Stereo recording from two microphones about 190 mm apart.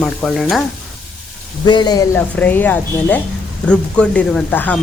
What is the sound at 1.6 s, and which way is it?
Speech, 20° left (ahead or behind).